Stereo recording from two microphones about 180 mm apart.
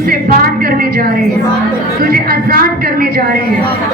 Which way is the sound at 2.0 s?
55° right (ahead or behind).